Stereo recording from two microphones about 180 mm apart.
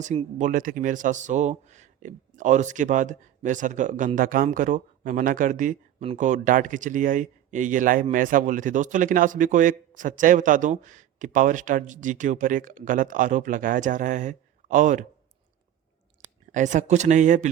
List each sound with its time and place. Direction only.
0.0 s a man's voice: 40° right (ahead or behind)
16.2 s speech: 45° right (ahead or behind)